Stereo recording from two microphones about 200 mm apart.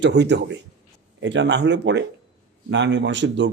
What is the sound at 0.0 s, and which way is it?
Speech, 60° right (ahead or behind).